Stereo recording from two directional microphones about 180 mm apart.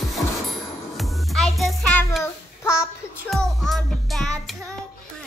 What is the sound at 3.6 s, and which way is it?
Music, centre (ahead or behind).